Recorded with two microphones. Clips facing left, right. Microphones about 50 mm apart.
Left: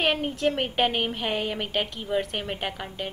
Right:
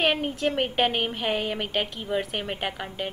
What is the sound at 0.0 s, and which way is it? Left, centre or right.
A woman's voice, centre.